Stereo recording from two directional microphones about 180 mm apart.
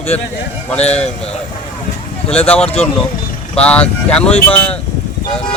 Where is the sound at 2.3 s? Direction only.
5° left (ahead or behind).